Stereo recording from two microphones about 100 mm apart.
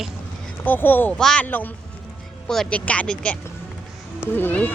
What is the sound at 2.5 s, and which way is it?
Speech, 10° left (ahead or behind).